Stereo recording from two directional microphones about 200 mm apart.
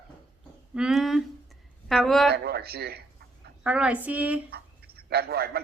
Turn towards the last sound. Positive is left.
turn(degrees=-50)  # may be behind; listen again after turning